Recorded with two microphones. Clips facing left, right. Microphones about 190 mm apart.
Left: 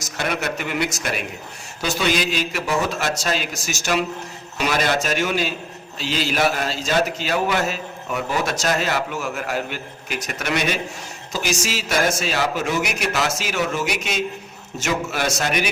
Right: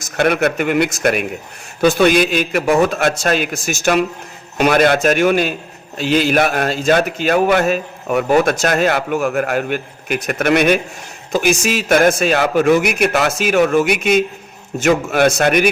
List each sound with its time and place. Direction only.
0.2 s a man's voice: 60° right (ahead or behind)